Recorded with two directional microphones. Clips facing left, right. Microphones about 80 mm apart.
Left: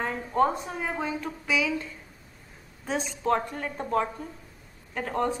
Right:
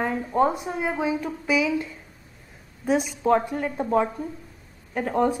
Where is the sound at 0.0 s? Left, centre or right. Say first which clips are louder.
Right 3 dB; centre.